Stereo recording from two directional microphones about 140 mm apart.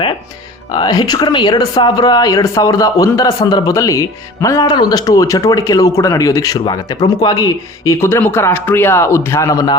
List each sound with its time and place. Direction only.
0.7 s speech: 30° left (ahead or behind)